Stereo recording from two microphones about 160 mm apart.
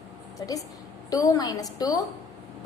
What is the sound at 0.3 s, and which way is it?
A woman's voice, 20° left (ahead or behind).